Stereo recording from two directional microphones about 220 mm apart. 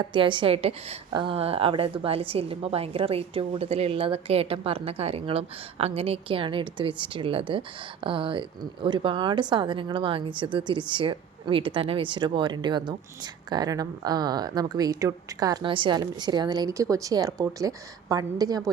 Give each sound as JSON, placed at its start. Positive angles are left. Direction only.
{"t": 0.0, "sound": "a woman's voice", "side_deg": -20}